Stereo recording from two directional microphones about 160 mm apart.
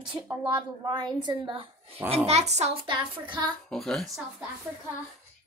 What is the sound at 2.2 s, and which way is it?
Speech, 40° right (ahead or behind).